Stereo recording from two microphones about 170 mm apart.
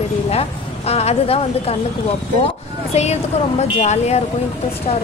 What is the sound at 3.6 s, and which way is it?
Speech, 40° left (ahead or behind).